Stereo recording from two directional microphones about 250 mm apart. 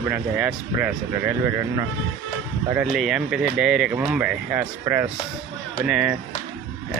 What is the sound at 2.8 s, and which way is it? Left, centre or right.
Speech, centre.